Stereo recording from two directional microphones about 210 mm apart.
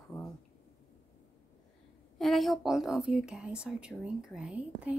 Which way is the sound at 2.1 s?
Centre (ahead or behind).